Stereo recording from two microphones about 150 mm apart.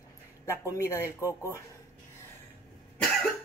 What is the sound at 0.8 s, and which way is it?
Speech, 20° left (ahead or behind).